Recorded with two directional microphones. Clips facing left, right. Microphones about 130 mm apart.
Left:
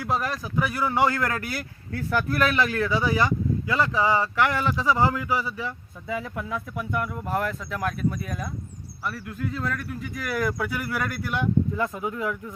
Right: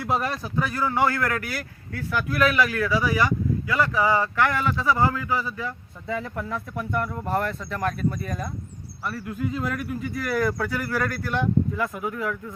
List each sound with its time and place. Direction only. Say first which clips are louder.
0.0 s speech: right 1 dB; centre (ahead or behind)
0.6 s a man's voice: even; 15° left (ahead or behind)
11.8 s a man's voice: even; 20° left (ahead or behind)